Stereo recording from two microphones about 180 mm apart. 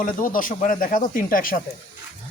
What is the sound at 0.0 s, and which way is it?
Speech, 50° left (ahead or behind).